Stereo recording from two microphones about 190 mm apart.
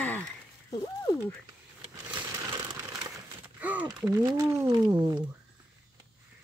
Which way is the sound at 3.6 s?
10° right (ahead or behind).